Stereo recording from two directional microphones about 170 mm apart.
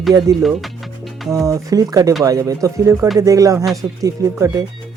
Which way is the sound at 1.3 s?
20° right (ahead or behind).